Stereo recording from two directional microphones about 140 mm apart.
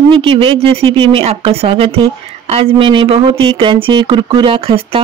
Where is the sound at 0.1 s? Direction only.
40° right (ahead or behind).